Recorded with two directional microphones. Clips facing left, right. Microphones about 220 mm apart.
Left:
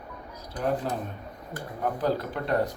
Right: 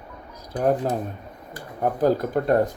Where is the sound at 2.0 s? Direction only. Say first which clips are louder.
Right 9 dB; 45° right (ahead or behind).